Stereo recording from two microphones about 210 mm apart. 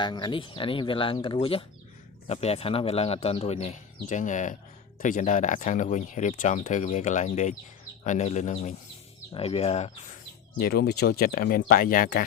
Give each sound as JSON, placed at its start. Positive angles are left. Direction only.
{"t": 0.0, "sound": "speech", "side_deg": 20}
{"t": 10.6, "sound": "speech", "side_deg": 50}